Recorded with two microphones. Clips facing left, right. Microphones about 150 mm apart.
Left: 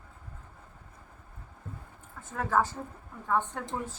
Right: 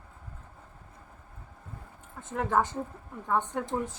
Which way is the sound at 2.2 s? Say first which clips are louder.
Right 1 dB; 20° right (ahead or behind).